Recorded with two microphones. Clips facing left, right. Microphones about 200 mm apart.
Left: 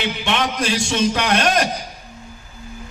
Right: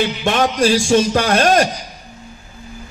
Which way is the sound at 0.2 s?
45° right (ahead or behind).